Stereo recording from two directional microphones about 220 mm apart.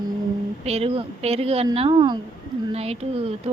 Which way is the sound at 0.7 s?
25° right (ahead or behind).